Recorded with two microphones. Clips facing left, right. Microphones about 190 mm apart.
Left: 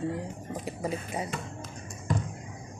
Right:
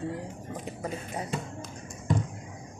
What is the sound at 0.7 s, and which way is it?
Speech, 10° left (ahead or behind).